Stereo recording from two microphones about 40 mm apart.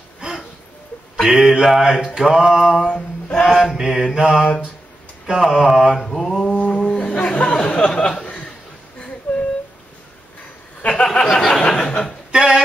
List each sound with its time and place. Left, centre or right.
0.2 s a sound: right
1.2 s mantra: centre
2.9 s singing: centre
3.4 s mantra: centre
3.7 s mantra: centre
5.9 s mantra: centre
6.4 s a sound: left
7.5 s speech: centre
9.3 s a sound: left
10.9 s speech: centre
12.3 s speech: centre